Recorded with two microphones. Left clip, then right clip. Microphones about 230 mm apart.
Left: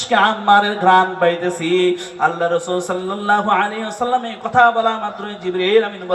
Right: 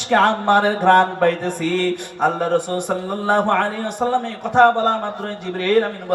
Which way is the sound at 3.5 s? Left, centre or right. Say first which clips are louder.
Left 2 dB; right.